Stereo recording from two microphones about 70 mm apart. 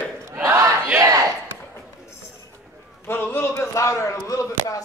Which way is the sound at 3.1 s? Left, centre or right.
Left.